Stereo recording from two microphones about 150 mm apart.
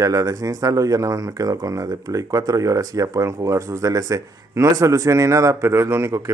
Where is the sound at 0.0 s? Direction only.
20° right (ahead or behind).